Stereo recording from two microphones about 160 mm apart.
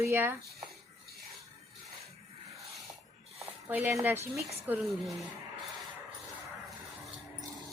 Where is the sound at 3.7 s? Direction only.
10° right (ahead or behind).